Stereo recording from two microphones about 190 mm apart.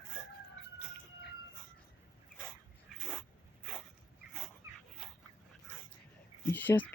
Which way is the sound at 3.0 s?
Centre (ahead or behind).